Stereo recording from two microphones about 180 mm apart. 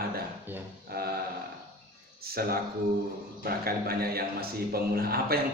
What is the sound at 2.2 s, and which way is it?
A man's voice, 55° right (ahead or behind).